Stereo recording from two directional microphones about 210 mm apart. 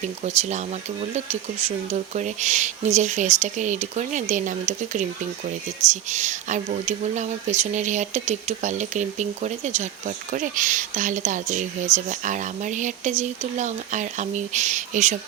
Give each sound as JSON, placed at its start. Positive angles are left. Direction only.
{"t": 0.2, "sound": "speech", "side_deg": -35}